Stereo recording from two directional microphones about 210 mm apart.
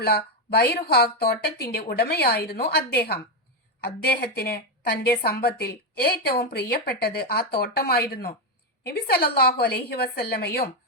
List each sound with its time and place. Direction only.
0.0 s a woman's voice: 50° left (ahead or behind)